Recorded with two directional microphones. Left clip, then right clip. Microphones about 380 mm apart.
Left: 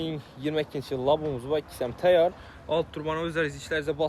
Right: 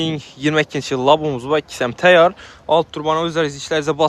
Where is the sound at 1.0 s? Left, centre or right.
Right.